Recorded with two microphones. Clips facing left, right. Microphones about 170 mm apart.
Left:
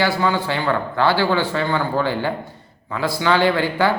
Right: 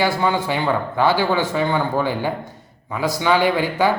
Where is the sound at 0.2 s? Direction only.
15° right (ahead or behind).